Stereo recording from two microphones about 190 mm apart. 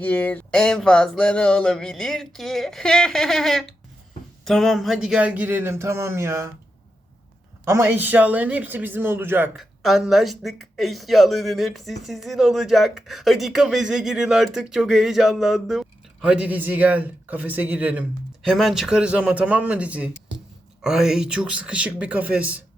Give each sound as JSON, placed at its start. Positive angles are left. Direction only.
{"t": 0.0, "sound": "a man's voice", "side_deg": 10}
{"t": 7.6, "sound": "a man's voice", "side_deg": -10}
{"t": 9.6, "sound": "a man's voice", "side_deg": 0}